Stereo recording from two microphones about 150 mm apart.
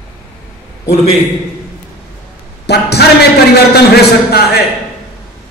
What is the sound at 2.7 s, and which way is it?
Speech, 90° left.